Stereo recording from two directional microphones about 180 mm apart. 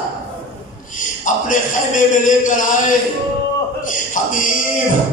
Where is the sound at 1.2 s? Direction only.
45° left (ahead or behind).